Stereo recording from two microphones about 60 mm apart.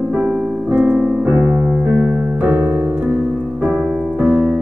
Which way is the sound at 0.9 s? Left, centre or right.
Centre.